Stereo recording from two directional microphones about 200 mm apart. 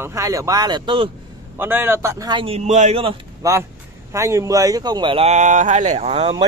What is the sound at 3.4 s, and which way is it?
Speech, 15° right (ahead or behind).